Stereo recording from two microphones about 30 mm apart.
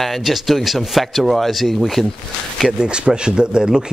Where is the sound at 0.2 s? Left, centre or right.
Centre.